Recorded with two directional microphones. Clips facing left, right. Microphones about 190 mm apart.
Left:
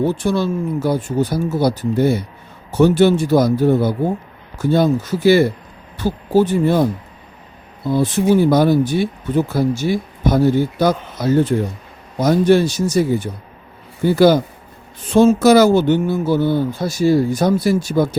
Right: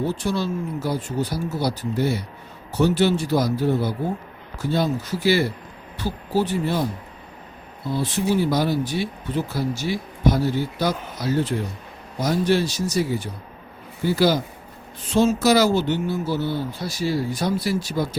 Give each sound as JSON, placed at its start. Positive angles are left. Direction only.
{"t": 0.0, "sound": "speech", "side_deg": 55}
{"t": 7.9, "sound": "speech", "side_deg": 50}